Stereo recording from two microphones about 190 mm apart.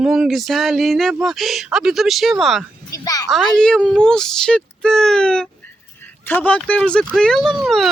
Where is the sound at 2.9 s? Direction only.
20° left (ahead or behind).